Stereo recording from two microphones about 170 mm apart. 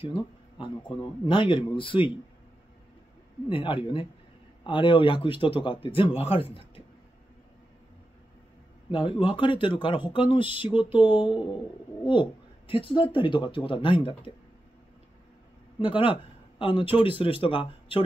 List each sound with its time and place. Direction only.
0.0 s speech: 30° left (ahead or behind)
3.4 s a man's voice: 30° left (ahead or behind)
8.9 s speech: 30° left (ahead or behind)
15.8 s a man's voice: 30° left (ahead or behind)